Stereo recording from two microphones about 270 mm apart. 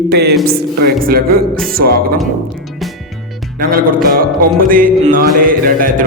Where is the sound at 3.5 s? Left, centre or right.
Right.